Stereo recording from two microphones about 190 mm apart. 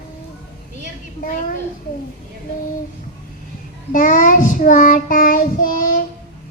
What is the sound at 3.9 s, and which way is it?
Child singing, 45° left (ahead or behind).